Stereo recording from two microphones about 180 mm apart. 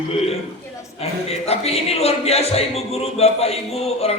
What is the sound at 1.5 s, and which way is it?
A man's voice, 35° left (ahead or behind).